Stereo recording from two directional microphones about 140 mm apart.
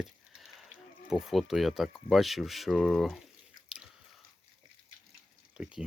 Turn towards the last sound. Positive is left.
turn(degrees=-5)  # may be behind; listen again after turning